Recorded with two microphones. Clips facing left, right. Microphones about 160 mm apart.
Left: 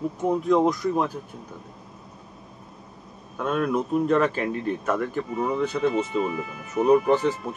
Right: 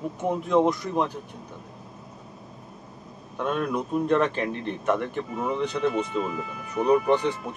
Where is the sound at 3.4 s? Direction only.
5° left (ahead or behind).